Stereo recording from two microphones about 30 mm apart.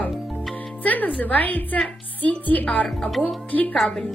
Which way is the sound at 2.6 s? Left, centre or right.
Left.